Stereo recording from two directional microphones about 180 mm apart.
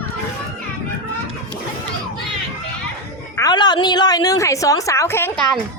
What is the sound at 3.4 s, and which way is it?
A woman's voice, 25° left (ahead or behind).